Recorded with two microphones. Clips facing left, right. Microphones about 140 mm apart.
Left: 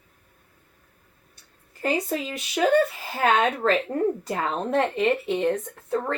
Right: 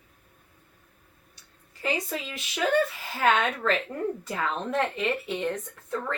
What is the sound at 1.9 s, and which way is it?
A woman's voice, 45° left (ahead or behind).